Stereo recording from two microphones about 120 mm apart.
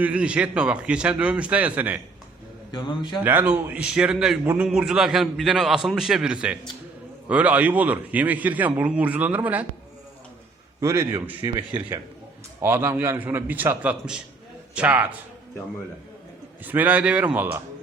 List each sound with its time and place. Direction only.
0.0 s a man's voice: 10° right (ahead or behind)
2.7 s a man's voice: 40° left (ahead or behind)
3.2 s a man's voice: 15° right (ahead or behind)
10.8 s a man's voice: 25° right (ahead or behind)
16.6 s a man's voice: 15° right (ahead or behind)